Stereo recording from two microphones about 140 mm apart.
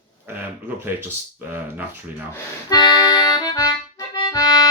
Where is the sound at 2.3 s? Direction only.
25° left (ahead or behind).